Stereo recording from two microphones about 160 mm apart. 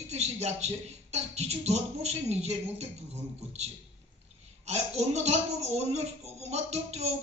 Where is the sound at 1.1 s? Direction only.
45° right (ahead or behind).